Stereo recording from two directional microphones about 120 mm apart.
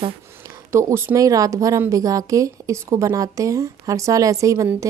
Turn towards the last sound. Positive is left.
turn(degrees=-25)  # may be behind; listen again after turning